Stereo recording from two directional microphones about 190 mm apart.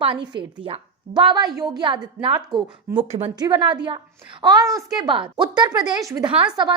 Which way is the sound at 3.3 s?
20° right (ahead or behind).